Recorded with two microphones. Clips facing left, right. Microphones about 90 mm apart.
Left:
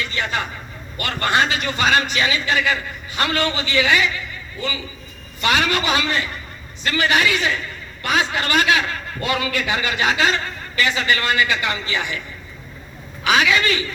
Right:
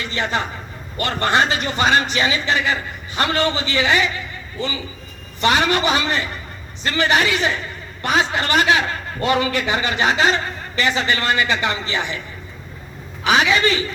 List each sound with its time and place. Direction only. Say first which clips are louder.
0.0 s a man's voice: right 2 dB; 30° right (ahead or behind)
5.4 s a man's voice: right 2 dB; 30° right (ahead or behind)
13.2 s a man's voice: right 1 dB; 30° right (ahead or behind)